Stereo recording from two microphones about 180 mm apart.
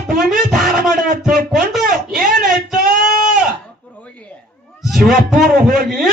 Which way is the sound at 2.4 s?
50° right (ahead or behind).